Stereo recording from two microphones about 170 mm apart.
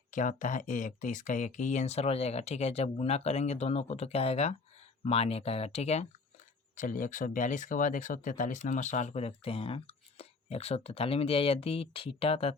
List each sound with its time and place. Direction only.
0.1 s speech: 50° left (ahead or behind)
6.7 s speech: 50° left (ahead or behind); by 12.5 s 35° left (ahead or behind)